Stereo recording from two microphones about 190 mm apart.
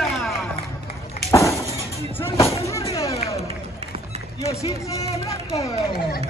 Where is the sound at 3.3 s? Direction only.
35° right (ahead or behind).